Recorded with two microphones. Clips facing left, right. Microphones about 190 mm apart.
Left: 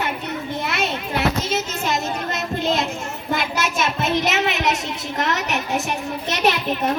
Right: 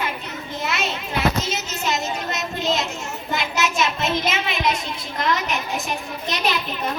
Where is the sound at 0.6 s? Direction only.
60° left (ahead or behind).